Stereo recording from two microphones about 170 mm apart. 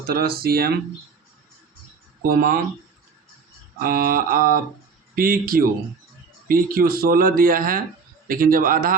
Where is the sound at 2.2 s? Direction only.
60° right (ahead or behind).